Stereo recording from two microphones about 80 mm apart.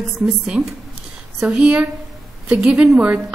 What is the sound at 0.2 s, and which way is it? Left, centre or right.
A woman's voice, centre.